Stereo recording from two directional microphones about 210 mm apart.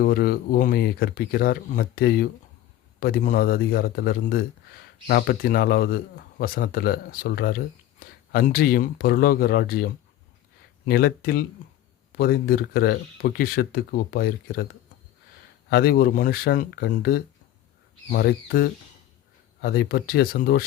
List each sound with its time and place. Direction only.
0.0 s speech: 50° left (ahead or behind)
15.7 s speech: 45° left (ahead or behind)